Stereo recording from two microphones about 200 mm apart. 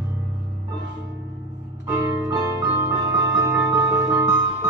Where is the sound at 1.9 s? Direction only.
20° right (ahead or behind).